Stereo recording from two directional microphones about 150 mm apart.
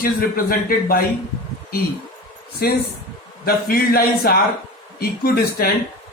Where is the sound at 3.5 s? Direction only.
80° left.